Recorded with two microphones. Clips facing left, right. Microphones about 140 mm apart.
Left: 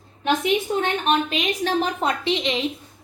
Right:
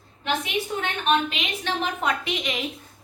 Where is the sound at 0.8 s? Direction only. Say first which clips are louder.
Left 2 dB; 40° left (ahead or behind).